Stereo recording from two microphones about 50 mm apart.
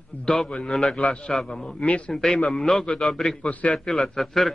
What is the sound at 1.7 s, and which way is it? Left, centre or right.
Speech, left.